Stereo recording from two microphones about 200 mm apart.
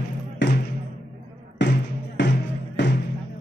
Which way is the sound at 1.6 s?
65° left (ahead or behind).